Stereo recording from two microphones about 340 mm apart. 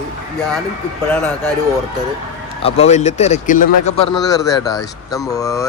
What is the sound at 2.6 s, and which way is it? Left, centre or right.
Speech, centre.